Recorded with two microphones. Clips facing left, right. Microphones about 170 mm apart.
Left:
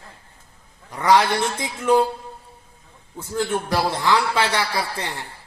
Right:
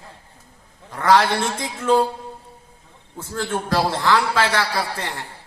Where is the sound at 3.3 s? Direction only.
20° left (ahead or behind).